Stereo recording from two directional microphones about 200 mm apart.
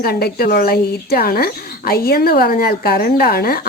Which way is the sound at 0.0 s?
50° left (ahead or behind).